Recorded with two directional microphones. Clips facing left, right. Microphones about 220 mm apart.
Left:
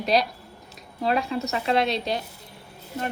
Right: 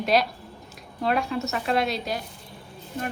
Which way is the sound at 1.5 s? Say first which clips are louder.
Left 2 dB; 25° left (ahead or behind).